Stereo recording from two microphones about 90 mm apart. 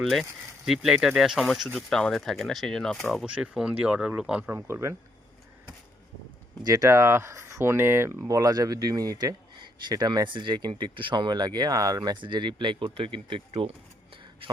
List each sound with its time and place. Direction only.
0.0 s speech: centre (ahead or behind)
3.2 s speech: 15° right (ahead or behind); by 4.9 s 30° right (ahead or behind)
6.6 s speech: 45° right (ahead or behind)
6.8 s speech: 30° right (ahead or behind)
8.3 s speech: 45° right (ahead or behind)
9.6 s speech: 55° right (ahead or behind)